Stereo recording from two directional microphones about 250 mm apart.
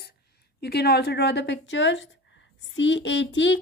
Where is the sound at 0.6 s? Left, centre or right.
Left.